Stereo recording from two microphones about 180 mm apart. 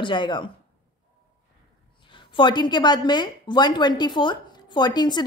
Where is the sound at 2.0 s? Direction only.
25° left (ahead or behind).